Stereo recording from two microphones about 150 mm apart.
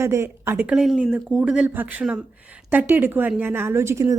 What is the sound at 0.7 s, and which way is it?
Speech, 5° right (ahead or behind).